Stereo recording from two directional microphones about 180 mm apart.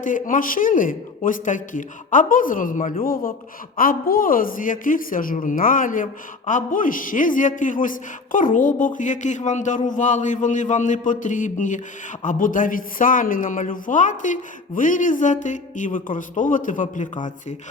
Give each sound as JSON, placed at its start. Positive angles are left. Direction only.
{"t": 0.0, "sound": "a woman's voice", "side_deg": 45}